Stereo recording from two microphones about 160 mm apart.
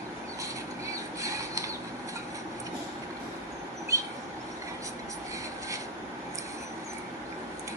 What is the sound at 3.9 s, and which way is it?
Train, 20° right (ahead or behind).